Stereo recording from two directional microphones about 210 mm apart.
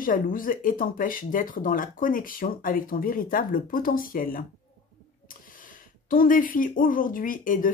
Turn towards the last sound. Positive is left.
turn(degrees=40)  # may be behind; listen again after turning